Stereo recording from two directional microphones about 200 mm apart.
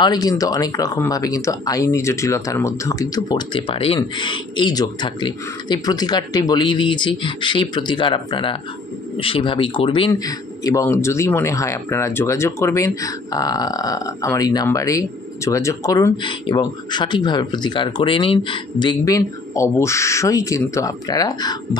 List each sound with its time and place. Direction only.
0.0 s speech: 20° left (ahead or behind)